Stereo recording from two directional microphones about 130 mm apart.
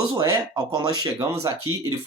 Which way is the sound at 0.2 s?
35° right (ahead or behind).